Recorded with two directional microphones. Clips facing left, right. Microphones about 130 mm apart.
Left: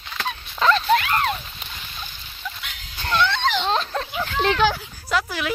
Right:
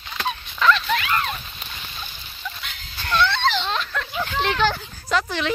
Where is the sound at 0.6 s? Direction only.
35° left (ahead or behind).